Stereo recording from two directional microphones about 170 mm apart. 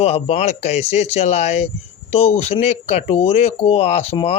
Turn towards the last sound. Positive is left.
turn(degrees=35)  # may be behind; listen again after turning